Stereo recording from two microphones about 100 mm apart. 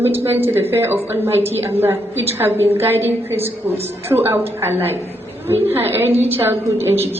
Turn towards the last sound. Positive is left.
turn(degrees=-25)  # may be behind; listen again after turning